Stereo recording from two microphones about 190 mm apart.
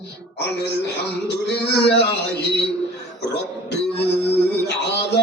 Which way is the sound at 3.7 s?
65° left (ahead or behind).